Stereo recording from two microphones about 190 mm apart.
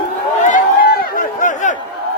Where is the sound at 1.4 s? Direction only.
40° left (ahead or behind).